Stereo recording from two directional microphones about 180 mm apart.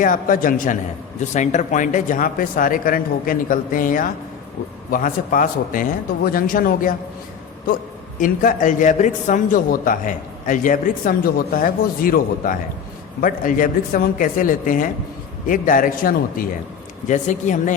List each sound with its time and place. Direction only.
0.0 s speech: 50° left (ahead or behind)
8.2 s speech: 50° left (ahead or behind)